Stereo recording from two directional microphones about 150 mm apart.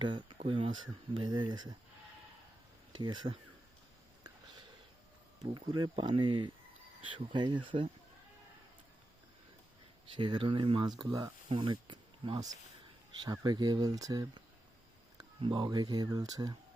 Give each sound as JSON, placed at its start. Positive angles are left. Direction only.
{"t": 0.0, "sound": "speech", "side_deg": -30}
{"t": 3.0, "sound": "speech", "side_deg": -30}
{"t": 5.5, "sound": "speech", "side_deg": -30}
{"t": 10.2, "sound": "speech", "side_deg": -30}